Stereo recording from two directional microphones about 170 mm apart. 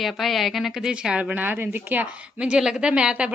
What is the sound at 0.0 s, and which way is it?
A woman's voice, centre (ahead or behind).